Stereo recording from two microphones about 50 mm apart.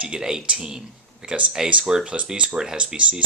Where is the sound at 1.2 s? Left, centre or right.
Right.